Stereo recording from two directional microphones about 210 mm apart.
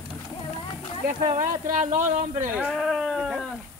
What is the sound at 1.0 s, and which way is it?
Speech, 40° right (ahead or behind).